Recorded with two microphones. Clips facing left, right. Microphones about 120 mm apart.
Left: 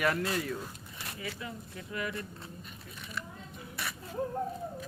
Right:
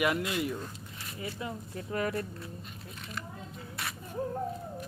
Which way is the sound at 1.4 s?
35° right (ahead or behind).